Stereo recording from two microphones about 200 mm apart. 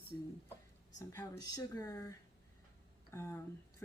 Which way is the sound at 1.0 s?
15° left (ahead or behind).